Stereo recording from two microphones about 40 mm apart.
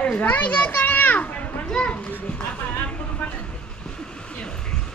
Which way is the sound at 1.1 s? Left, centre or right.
Left.